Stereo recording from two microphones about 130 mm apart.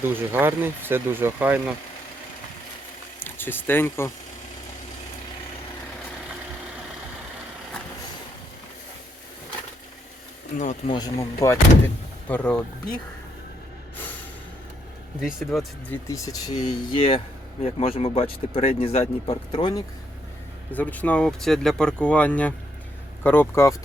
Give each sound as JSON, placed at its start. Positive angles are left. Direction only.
{"t": 0.0, "sound": "speech", "side_deg": -15}
{"t": 3.2, "sound": "speech", "side_deg": 15}
{"t": 10.5, "sound": "speech", "side_deg": 70}
{"t": 10.8, "sound": "speech", "side_deg": 30}
{"t": 12.3, "sound": "speech", "side_deg": 10}
{"t": 15.2, "sound": "speech", "side_deg": 0}
{"t": 16.0, "sound": "speech", "side_deg": 25}
{"t": 16.6, "sound": "speech", "side_deg": 45}
{"t": 20.7, "sound": "speech", "side_deg": 10}